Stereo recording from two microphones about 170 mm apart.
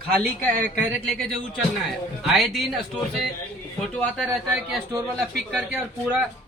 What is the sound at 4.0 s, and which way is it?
Speech, centre (ahead or behind).